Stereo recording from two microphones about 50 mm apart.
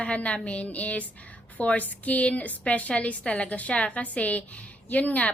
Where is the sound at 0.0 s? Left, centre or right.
Left.